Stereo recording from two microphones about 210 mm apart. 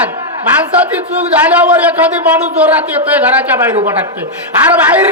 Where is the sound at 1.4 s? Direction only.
5° right (ahead or behind).